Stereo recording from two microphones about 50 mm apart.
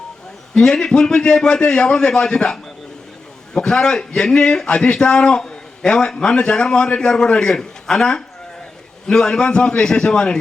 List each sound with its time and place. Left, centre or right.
0.5 s a man's voice: centre